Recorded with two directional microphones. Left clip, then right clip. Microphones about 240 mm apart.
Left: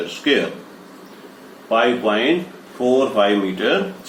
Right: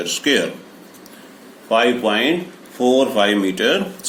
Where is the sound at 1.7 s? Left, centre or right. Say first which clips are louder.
Right 1 dB; right.